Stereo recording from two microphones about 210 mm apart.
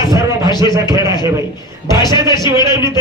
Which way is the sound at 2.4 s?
15° right (ahead or behind).